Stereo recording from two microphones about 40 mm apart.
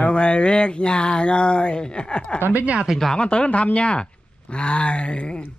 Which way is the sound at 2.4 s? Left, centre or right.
Right.